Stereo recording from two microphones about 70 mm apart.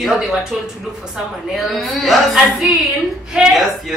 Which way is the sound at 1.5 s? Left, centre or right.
Centre.